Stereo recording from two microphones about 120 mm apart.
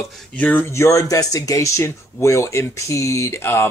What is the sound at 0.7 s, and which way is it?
Speech, 25° left (ahead or behind).